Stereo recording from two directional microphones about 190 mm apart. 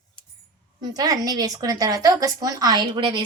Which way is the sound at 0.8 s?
20° right (ahead or behind).